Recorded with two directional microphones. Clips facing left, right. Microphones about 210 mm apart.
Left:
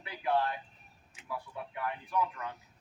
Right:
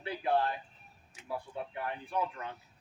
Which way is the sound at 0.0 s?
30° right (ahead or behind).